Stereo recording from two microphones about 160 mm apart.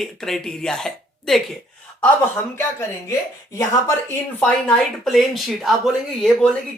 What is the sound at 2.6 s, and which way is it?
Speech, 15° left (ahead or behind).